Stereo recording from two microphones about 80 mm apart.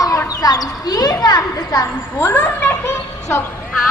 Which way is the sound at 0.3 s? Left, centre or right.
Left.